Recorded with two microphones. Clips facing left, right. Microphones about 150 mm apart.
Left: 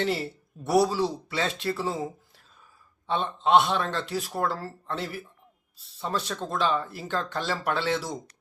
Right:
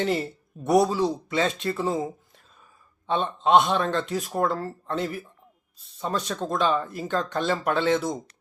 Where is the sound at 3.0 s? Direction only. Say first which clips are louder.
Right 2 dB; 15° right (ahead or behind).